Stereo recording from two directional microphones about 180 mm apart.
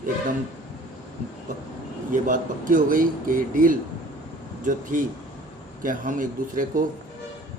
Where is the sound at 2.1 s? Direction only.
50° right (ahead or behind).